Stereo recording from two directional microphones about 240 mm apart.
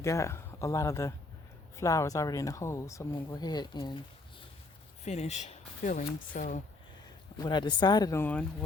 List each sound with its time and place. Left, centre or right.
0.0 s speech: centre
5.0 s speech: left
7.3 s speech: centre